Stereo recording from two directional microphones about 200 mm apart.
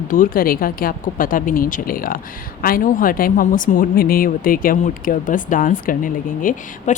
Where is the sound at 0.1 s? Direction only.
45° left (ahead or behind).